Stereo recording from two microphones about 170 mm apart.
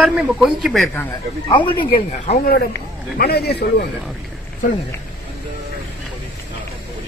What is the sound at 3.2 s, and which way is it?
Speech, 70° left (ahead or behind).